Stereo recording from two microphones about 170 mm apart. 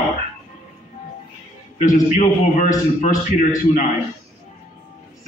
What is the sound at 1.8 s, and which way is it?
Speech, 50° left (ahead or behind).